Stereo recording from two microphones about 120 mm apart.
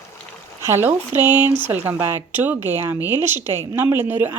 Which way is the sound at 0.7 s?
20° right (ahead or behind).